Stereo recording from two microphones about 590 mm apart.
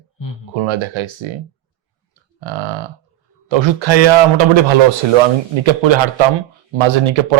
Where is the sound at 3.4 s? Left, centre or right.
Right.